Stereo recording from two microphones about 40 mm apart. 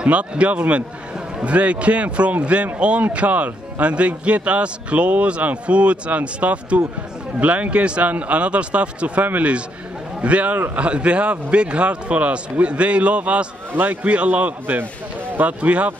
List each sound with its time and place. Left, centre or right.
0.0 s a man's voice: right